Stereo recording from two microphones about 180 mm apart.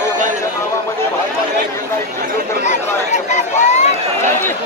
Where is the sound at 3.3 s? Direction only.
40° left (ahead or behind).